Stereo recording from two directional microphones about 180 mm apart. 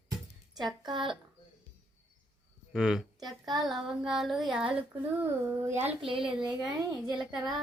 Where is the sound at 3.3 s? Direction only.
Centre (ahead or behind).